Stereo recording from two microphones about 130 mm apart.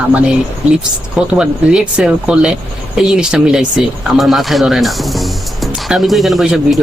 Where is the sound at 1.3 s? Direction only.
5° right (ahead or behind).